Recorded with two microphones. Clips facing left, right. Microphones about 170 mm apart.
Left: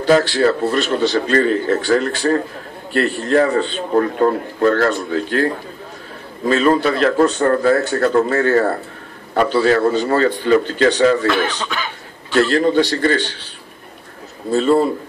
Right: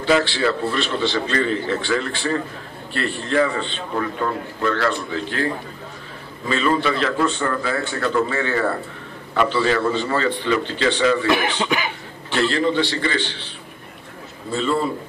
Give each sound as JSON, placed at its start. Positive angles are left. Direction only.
{"t": 0.0, "sound": "a man's voice", "side_deg": 40}
{"t": 6.5, "sound": "a man's voice", "side_deg": 45}
{"t": 11.2, "sound": "speech", "side_deg": -15}
{"t": 12.4, "sound": "a man's voice", "side_deg": 45}
{"t": 14.5, "sound": "a man's voice", "side_deg": 40}